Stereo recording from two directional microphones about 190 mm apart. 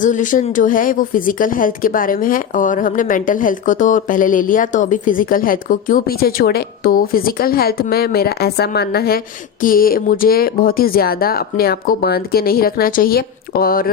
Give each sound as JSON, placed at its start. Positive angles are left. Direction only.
{"t": 0.0, "sound": "speech", "side_deg": 45}